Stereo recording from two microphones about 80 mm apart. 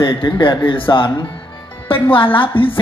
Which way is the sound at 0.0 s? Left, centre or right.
Left.